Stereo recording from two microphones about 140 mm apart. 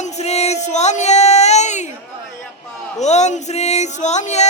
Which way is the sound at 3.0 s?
55° left (ahead or behind).